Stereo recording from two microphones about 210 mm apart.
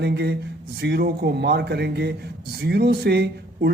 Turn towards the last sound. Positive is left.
turn(degrees=-50)  # may be behind; listen again after turning